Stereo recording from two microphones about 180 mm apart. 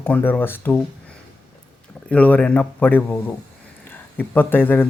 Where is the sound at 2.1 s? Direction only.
10° left (ahead or behind).